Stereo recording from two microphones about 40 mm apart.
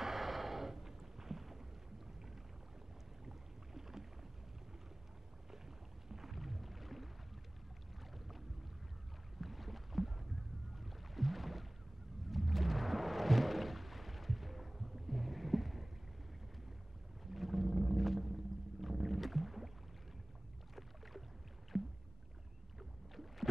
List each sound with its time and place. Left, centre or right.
0.0 s a sound: centre
3.3 s boat: centre
6.0 s music: centre
8.1 s boat: centre
12.3 s a sound: centre
17.2 s whale vocalization: centre
21.7 s rowboat: centre